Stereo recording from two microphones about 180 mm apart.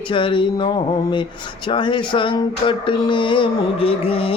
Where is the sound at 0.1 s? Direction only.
25° left (ahead or behind).